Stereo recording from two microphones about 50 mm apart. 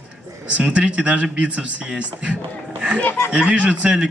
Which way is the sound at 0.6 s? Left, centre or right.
Right.